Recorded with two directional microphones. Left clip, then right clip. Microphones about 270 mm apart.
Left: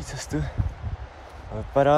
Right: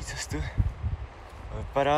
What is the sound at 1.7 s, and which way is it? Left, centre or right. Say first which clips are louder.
Speech: left 5 dB; left.